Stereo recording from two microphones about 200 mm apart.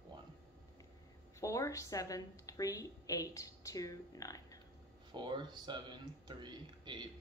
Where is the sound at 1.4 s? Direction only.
15° left (ahead or behind).